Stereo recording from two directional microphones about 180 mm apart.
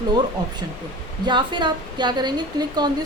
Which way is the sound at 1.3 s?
25° right (ahead or behind).